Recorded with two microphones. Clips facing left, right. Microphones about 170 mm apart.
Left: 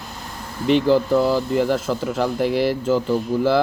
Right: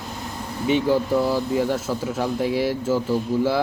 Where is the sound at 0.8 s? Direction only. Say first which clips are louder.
Left 4 dB; centre (ahead or behind).